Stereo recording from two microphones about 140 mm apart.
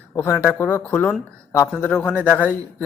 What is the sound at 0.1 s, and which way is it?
Speech, 15° left (ahead or behind).